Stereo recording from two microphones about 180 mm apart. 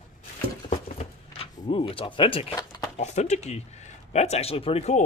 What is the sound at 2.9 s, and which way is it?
Speech, 40° left (ahead or behind).